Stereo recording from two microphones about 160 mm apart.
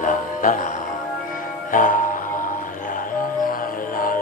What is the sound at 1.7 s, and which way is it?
Music, 55° left (ahead or behind).